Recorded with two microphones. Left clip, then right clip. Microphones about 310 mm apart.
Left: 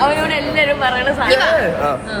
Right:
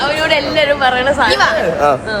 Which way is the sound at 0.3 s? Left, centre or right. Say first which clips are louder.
Right 3 dB; right.